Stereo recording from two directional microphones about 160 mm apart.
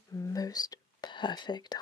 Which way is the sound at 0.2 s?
20° left (ahead or behind).